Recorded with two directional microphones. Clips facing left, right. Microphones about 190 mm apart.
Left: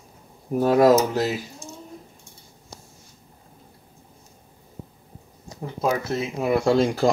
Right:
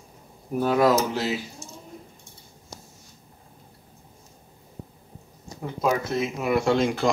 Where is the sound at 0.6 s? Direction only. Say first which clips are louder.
Left 4 dB; 40° left (ahead or behind).